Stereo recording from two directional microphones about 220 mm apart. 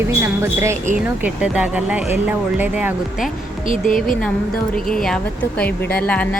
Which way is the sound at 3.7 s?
35° left (ahead or behind).